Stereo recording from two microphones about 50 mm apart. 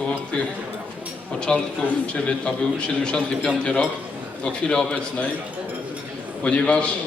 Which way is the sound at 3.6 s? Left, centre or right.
Left.